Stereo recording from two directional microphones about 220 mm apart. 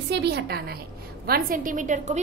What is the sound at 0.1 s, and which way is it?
A woman's voice, 50° right (ahead or behind).